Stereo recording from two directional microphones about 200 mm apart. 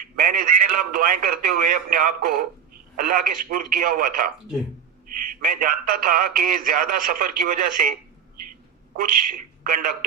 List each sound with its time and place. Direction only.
0.2 s speech: 45° right (ahead or behind)
5.4 s speech: 45° right (ahead or behind)
9.0 s speech: 45° right (ahead or behind)